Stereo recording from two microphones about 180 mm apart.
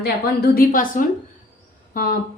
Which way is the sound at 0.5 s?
50° left (ahead or behind).